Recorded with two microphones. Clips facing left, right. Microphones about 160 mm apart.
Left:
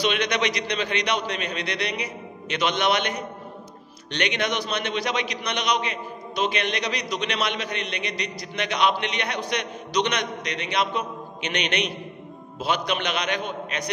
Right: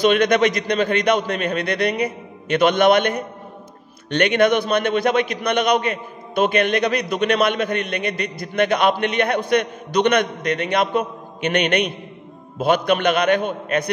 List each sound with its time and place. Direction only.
0.0 s a man's voice: 50° right (ahead or behind)